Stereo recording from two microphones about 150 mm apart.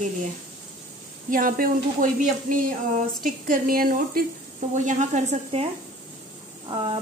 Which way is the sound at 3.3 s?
65° right (ahead or behind).